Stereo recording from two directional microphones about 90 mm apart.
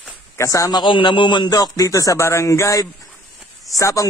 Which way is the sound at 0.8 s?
65° left (ahead or behind).